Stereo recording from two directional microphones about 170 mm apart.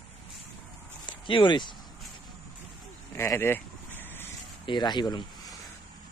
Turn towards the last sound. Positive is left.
turn(degrees=25)  # may be behind; listen again after turning